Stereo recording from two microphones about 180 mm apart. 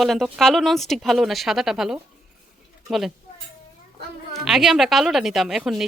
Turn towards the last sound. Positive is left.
turn(degrees=0)  # may be behind; listen again after turning